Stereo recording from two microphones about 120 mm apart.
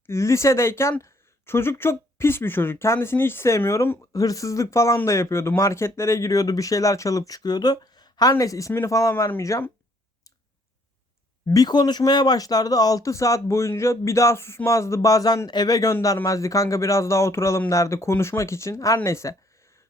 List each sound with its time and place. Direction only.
0.0 s speech: 25° left (ahead or behind)
11.4 s speech: 30° left (ahead or behind)